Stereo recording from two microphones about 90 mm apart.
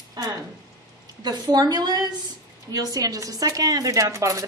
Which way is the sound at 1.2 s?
50° right (ahead or behind).